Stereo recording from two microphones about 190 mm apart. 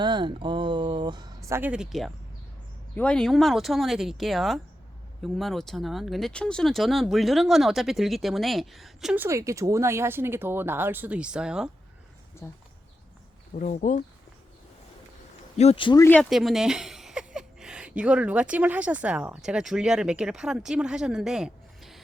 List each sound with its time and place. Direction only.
0.0 s speech: 25° right (ahead or behind); by 11.7 s 5° right (ahead or behind)
13.6 s speech: 40° left (ahead or behind)
15.5 s speech: 30° left (ahead or behind)
16.3 s a woman's voice: centre (ahead or behind)